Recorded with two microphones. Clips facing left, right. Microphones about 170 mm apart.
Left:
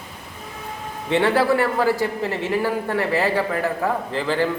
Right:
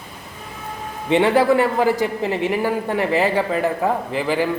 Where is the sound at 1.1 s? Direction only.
15° right (ahead or behind).